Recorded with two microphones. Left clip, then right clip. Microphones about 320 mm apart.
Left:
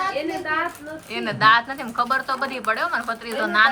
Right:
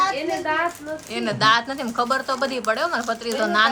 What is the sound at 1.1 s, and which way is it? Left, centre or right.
Speech, centre.